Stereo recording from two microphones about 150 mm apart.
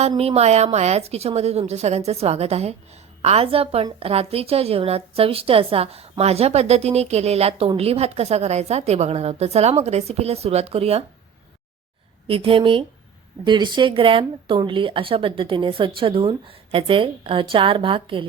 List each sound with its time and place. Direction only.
0.2 s a woman's voice: 45° right (ahead or behind)
12.3 s speech: 40° right (ahead or behind)